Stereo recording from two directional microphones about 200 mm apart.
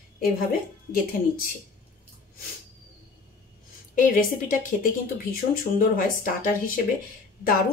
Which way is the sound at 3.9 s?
45° left (ahead or behind).